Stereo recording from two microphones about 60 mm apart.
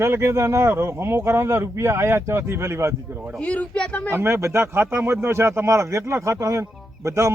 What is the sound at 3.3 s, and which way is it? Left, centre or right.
Speech, left.